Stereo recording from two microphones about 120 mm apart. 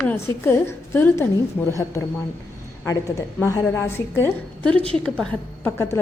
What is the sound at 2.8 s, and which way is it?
A woman's voice, 25° left (ahead or behind).